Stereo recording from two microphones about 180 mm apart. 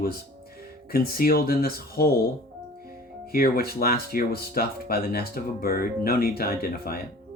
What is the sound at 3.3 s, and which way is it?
Speech, 55° left (ahead or behind).